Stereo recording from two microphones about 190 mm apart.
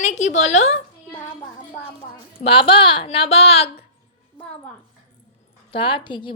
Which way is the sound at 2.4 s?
30° left (ahead or behind).